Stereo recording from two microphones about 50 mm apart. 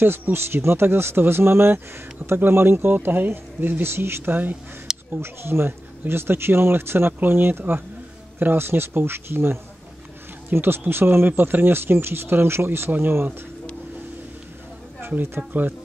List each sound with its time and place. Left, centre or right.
0.0 s speech: right
5.1 s speech: right
15.5 s speech: right